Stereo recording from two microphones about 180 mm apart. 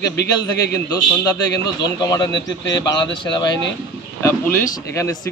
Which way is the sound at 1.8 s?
20° left (ahead or behind).